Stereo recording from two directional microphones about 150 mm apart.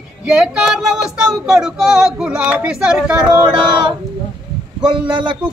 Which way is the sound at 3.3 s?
30° right (ahead or behind).